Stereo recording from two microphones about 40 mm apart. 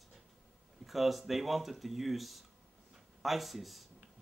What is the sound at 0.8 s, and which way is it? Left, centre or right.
Speech, centre.